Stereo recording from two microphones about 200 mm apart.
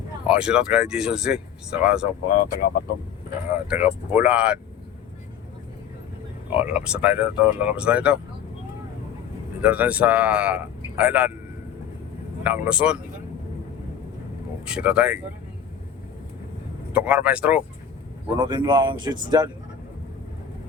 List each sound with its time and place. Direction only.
0.3 s speech: 5° right (ahead or behind)
2.6 s speech: 55° left (ahead or behind)
3.5 s speech: 10° right (ahead or behind)
6.6 s speech: 5° right (ahead or behind)
9.6 s a man's voice: 5° right (ahead or behind)
12.4 s speech: 5° right (ahead or behind)
14.6 s speech: 5° right (ahead or behind)
16.9 s speech: 5° right (ahead or behind)
18.3 s speech: 20° right (ahead or behind)